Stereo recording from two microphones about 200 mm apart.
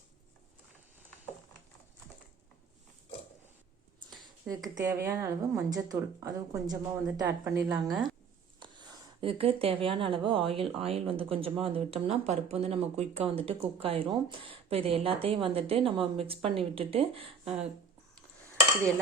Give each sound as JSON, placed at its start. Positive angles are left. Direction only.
{"t": 4.4, "sound": "speech", "side_deg": -20}
{"t": 7.9, "sound": "speech", "side_deg": 0}
{"t": 9.2, "sound": "speech", "side_deg": -30}